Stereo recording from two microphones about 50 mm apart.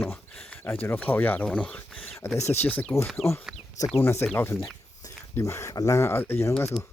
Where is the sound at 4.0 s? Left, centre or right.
Left.